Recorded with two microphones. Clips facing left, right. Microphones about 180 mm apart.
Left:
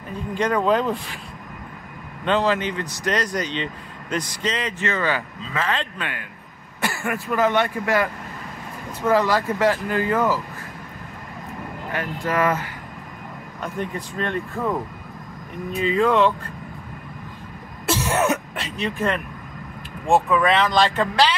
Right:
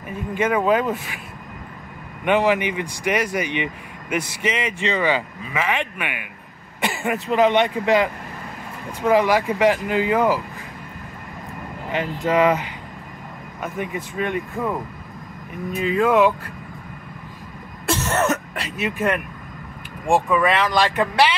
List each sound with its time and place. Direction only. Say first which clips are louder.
0.1 s speech: right 1 dB; 5° right (ahead or behind)
2.2 s speech: right 2 dB; 15° right (ahead or behind)
11.9 s speech: right 4 dB; 20° right (ahead or behind)
13.6 s speech: right 1 dB; 5° right (ahead or behind)
17.8 s throat clearing: even; 5° left (ahead or behind)
20.1 s speech: even; 5° right (ahead or behind)